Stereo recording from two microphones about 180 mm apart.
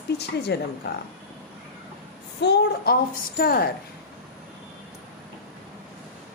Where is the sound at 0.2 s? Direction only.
65° left (ahead or behind).